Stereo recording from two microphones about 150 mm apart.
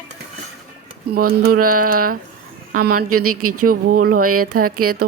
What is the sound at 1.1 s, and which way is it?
Speech, 85° right.